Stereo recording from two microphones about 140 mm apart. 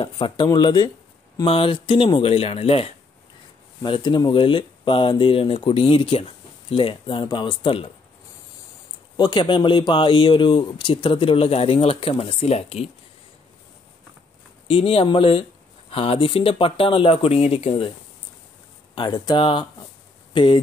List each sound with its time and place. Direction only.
0.0 s speech: 35° left (ahead or behind)
9.1 s speech: 35° left (ahead or behind)
14.7 s speech: 40° left (ahead or behind)
18.9 s speech: 30° left (ahead or behind)